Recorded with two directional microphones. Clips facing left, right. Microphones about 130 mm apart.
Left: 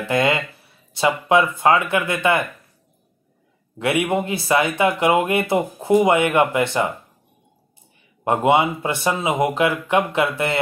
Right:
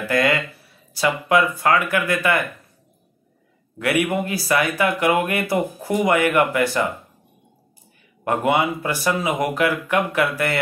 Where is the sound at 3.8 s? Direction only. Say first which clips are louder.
Left 1 dB; 25° left (ahead or behind).